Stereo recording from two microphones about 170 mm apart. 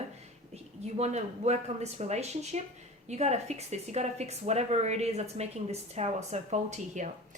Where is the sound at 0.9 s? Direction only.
40° right (ahead or behind).